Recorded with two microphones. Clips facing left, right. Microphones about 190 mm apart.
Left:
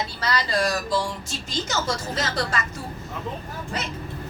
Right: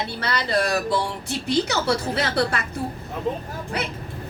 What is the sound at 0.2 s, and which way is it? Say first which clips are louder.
A woman's voice: right 1 dB; 60° right (ahead or behind).